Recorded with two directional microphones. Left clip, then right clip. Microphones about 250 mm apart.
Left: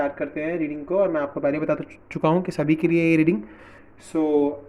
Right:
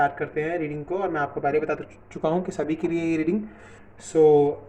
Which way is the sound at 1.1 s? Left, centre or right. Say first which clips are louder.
Even; left.